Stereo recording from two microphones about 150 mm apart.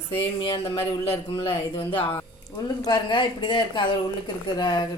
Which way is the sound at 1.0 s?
40° left (ahead or behind).